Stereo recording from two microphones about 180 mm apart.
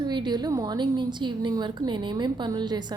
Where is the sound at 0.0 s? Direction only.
25° right (ahead or behind).